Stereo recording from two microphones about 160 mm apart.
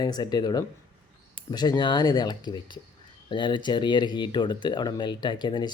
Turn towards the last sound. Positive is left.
turn(degrees=25)  # may be behind; listen again after turning